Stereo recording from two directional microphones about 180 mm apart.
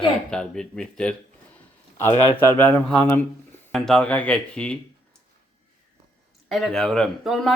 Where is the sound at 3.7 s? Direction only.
Centre (ahead or behind).